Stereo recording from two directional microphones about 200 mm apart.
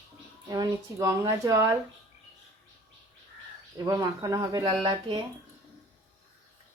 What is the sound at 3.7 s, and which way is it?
Speech, 20° right (ahead or behind).